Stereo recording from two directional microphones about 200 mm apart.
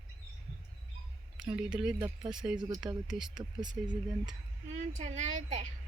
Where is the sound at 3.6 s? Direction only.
20° right (ahead or behind).